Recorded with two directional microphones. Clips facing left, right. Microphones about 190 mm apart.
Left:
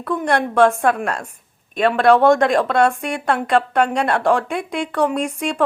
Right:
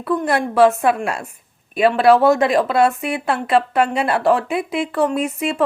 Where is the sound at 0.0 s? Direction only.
5° right (ahead or behind).